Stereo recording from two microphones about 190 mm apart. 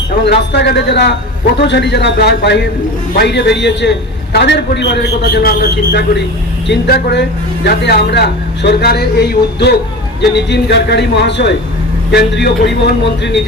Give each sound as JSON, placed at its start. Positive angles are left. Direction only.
{"t": 0.3, "sound": "speech", "side_deg": 60}